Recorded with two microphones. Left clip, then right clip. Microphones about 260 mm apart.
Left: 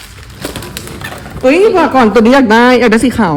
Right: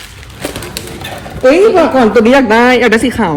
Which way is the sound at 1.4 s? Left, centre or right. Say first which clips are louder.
Right 1 dB; centre.